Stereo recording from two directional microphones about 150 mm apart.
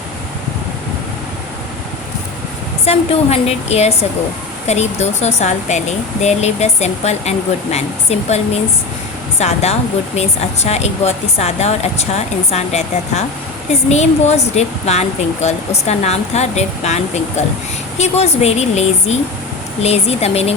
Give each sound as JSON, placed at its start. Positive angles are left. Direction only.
{"t": 2.8, "sound": "speech", "side_deg": 45}
{"t": 9.4, "sound": "speech", "side_deg": 45}